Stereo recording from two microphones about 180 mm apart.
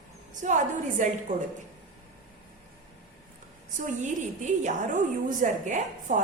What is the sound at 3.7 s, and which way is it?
A woman's voice, 40° right (ahead or behind).